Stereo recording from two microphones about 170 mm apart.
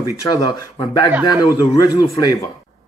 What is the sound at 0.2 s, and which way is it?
Speech, 20° left (ahead or behind).